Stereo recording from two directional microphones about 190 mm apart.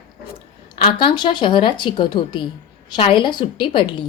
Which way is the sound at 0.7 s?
25° left (ahead or behind).